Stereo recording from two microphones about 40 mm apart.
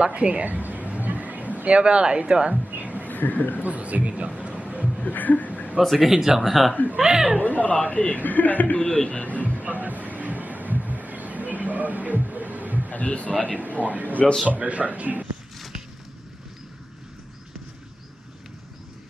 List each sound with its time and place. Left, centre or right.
0.0 s speech: right
0.6 s a sound: right
2.7 s a sound: right
3.1 s speech: left
3.6 s a man's voice: right
4.5 s a sound: right
5.0 s chuckle: left
5.8 s speech: centre
7.0 s speech: centre
7.4 s a man's voice: left
8.7 s a man's voice: left
9.6 s a sound: right
12.9 s a man's voice: left
13.6 s a man's voice: right